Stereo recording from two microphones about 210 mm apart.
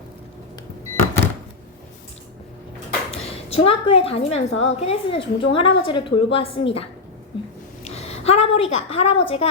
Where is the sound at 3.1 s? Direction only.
30° left (ahead or behind).